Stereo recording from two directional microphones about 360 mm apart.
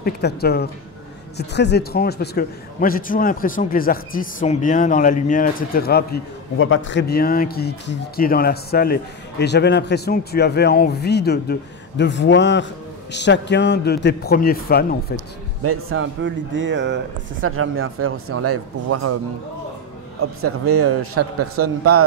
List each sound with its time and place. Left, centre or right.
0.0 s a man's voice: left
15.6 s speech: right
20.2 s speech: right